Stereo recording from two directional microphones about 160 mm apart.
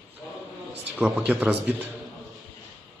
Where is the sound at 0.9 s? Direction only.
10° right (ahead or behind).